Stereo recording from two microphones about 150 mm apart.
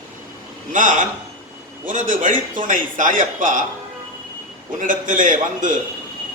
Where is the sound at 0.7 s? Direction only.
60° right (ahead or behind).